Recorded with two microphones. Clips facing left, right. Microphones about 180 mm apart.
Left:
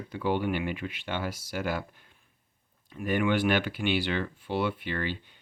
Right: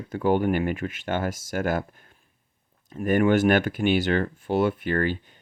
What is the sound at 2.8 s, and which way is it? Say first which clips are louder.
Speech: right 6 dB; 45° right (ahead or behind).